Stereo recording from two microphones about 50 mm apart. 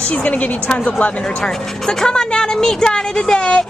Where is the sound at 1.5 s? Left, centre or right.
Centre.